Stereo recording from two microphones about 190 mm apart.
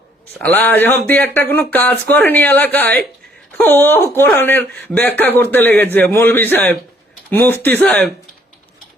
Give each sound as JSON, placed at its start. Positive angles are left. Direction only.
{"t": 0.4, "sound": "speech", "side_deg": 10}